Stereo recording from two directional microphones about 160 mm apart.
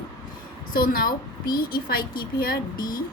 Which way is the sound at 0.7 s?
65° left (ahead or behind).